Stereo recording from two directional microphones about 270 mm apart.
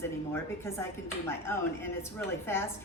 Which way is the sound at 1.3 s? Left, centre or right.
Centre.